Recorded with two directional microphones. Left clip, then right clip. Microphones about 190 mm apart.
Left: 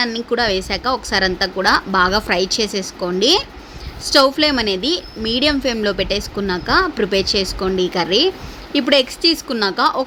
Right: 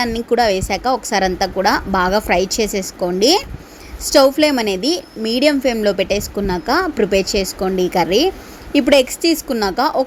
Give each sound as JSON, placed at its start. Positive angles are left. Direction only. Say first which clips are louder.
{"t": 0.0, "sound": "a woman's voice", "louder": "right 3 dB", "side_deg": -10}